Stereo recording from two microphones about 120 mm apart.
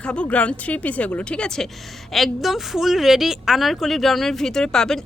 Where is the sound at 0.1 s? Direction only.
10° left (ahead or behind).